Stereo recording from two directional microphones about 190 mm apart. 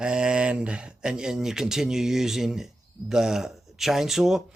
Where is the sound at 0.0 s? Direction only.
5° right (ahead or behind).